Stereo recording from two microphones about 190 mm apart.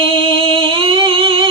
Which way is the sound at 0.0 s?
30° right (ahead or behind).